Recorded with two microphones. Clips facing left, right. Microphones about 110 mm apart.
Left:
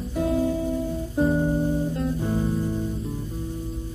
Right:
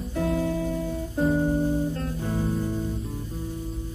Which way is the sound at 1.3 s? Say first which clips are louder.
Even; 10° left (ahead or behind).